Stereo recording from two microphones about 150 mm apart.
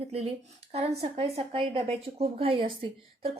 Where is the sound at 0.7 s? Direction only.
40° right (ahead or behind).